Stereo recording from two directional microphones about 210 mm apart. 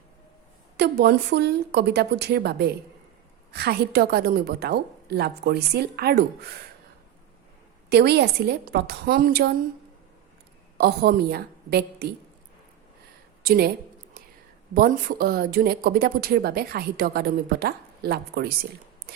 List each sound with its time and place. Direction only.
0.8 s speech: 50° right (ahead or behind)
7.9 s speech: 50° right (ahead or behind)
10.8 s a woman's voice: 50° right (ahead or behind)
13.4 s speech: 45° right (ahead or behind)
14.7 s speech: 40° right (ahead or behind)